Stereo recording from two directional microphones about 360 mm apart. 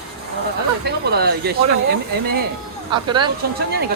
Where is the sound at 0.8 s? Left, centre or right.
Right.